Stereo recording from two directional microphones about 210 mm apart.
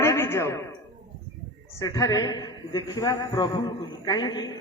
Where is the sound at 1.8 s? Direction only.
15° left (ahead or behind).